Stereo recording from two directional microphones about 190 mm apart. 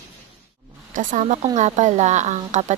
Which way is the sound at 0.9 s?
45° right (ahead or behind).